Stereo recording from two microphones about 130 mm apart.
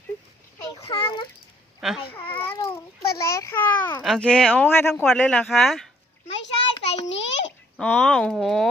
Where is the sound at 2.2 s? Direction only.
45° left (ahead or behind).